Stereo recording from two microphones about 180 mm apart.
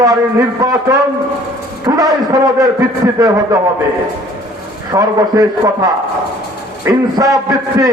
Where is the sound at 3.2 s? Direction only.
20° right (ahead or behind).